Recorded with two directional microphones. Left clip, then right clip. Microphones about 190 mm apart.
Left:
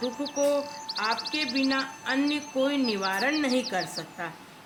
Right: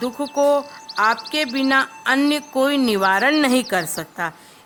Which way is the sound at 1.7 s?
50° right (ahead or behind).